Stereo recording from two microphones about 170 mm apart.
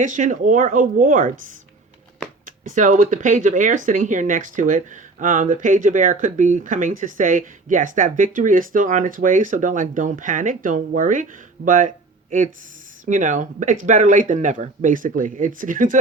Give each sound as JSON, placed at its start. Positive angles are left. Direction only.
{"t": 0.0, "sound": "speech", "side_deg": -50}
{"t": 2.6, "sound": "speech", "side_deg": -50}
{"t": 13.1, "sound": "speech", "side_deg": -45}